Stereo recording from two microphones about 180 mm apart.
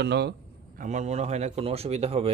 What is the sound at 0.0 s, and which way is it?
Speech, 70° right (ahead or behind).